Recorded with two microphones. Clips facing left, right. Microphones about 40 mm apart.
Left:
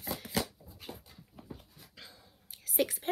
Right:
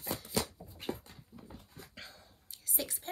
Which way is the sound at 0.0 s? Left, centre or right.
Left.